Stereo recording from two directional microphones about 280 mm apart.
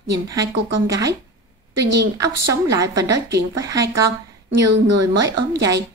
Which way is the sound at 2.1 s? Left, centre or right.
Centre.